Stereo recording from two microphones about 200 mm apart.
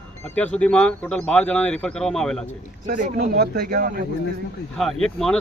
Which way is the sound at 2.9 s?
40° right (ahead or behind).